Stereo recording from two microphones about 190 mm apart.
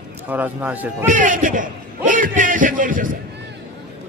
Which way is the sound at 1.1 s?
45° right (ahead or behind).